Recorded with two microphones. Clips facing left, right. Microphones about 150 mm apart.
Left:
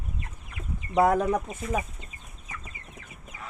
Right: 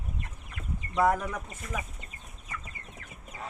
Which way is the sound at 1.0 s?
60° left (ahead or behind).